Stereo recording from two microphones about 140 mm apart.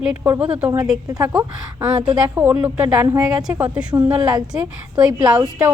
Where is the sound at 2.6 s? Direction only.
15° right (ahead or behind).